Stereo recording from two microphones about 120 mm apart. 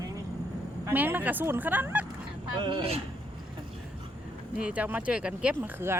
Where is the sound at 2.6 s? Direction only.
45° right (ahead or behind).